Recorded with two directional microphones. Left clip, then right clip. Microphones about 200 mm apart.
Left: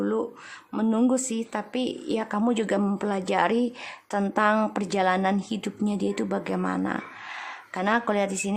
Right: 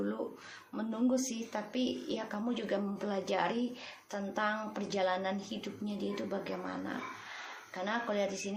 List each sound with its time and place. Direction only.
0.7 s speech: 40° left (ahead or behind)